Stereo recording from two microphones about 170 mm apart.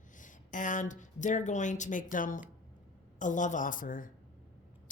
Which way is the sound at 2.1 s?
50° left (ahead or behind).